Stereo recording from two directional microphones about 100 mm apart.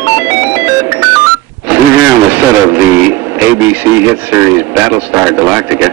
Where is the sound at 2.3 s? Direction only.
20° right (ahead or behind).